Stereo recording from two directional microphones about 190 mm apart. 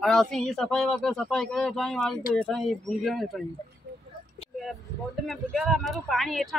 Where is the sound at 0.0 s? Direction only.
Centre (ahead or behind).